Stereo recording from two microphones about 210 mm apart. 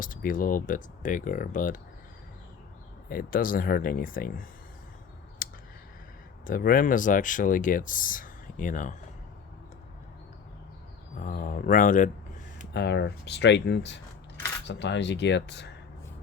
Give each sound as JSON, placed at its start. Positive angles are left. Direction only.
{"t": 0.0, "sound": "speech", "side_deg": 40}
{"t": 3.1, "sound": "speech", "side_deg": 45}
{"t": 5.4, "sound": "a sound", "side_deg": 40}
{"t": 6.4, "sound": "speech", "side_deg": 40}
{"t": 11.2, "sound": "speech", "side_deg": 40}
{"t": 12.7, "sound": "speech", "side_deg": 55}